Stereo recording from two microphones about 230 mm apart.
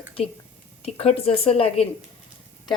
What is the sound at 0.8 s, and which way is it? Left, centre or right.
A woman's voice, left.